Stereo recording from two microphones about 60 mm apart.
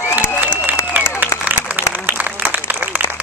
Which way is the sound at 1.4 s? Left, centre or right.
Right.